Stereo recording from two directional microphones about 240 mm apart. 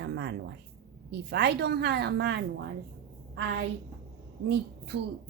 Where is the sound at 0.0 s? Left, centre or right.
Right.